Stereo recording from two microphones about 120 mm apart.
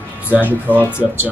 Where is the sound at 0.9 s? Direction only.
20° left (ahead or behind).